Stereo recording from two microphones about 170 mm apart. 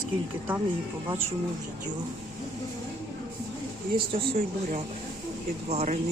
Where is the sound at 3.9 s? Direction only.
35° right (ahead or behind).